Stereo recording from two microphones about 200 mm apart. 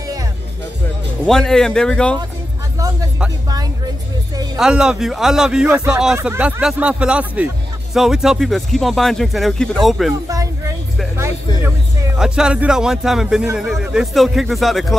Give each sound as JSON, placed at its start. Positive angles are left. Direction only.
{"t": 0.0, "sound": "music", "side_deg": -15}
{"t": 1.2, "sound": "speech", "side_deg": 5}
{"t": 3.4, "sound": "vehicle", "side_deg": -20}
{"t": 4.6, "sound": "speech", "side_deg": -5}
{"t": 10.2, "sound": "music", "side_deg": -15}
{"t": 12.2, "sound": "speech", "side_deg": -5}